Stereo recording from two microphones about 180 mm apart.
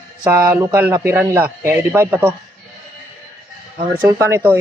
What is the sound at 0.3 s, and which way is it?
A man's voice, 10° right (ahead or behind).